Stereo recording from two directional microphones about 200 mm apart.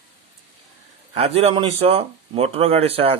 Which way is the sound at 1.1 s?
30° right (ahead or behind).